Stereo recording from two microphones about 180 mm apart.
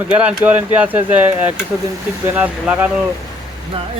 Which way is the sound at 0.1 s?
5° right (ahead or behind).